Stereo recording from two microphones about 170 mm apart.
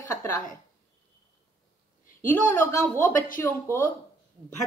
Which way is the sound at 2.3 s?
15° left (ahead or behind).